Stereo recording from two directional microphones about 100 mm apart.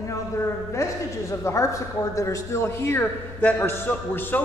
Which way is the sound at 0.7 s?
30° left (ahead or behind).